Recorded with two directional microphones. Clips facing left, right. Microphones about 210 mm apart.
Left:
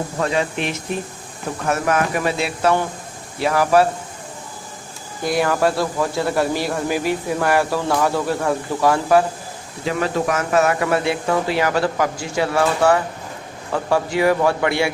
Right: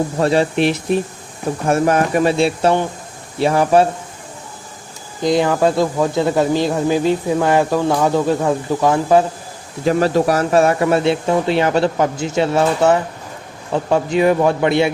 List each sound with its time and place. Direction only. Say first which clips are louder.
0.2 s speech: right 6 dB; 35° right (ahead or behind)
5.2 s speech: right 4 dB; 20° right (ahead or behind)
9.8 s speech: right 6 dB; 40° right (ahead or behind); by 14.8 s 20° right (ahead or behind)